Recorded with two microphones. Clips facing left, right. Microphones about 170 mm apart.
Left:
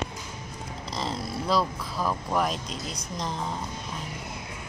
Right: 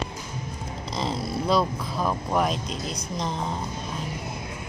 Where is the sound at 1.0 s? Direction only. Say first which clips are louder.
Right 4 dB; 5° left (ahead or behind).